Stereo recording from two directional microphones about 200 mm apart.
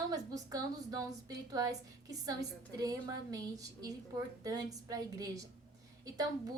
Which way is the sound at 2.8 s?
20° right (ahead or behind).